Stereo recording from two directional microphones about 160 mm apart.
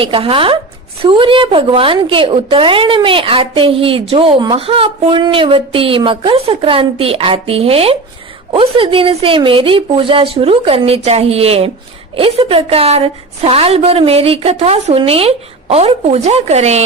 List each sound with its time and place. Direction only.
0.0 s a woman's voice: 35° right (ahead or behind)